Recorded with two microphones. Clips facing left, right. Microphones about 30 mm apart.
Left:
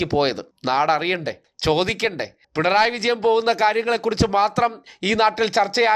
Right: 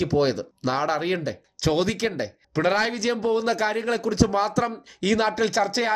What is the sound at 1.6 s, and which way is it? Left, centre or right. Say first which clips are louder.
Speech: left 3 dB; left.